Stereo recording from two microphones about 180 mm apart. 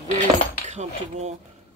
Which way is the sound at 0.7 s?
40° right (ahead or behind).